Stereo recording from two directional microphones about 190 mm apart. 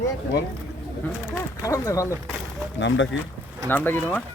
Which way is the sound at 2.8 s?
75° left (ahead or behind).